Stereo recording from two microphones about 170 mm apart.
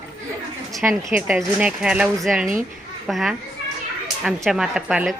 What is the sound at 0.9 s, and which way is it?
Speech, 5° right (ahead or behind).